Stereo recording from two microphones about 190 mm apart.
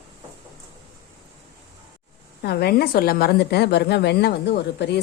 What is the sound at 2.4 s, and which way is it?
A woman's voice, 55° left (ahead or behind).